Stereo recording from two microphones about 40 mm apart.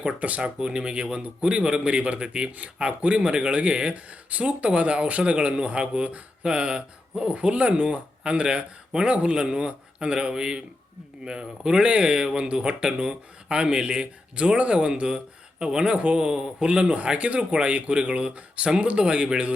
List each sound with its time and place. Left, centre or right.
0.0 s speech: right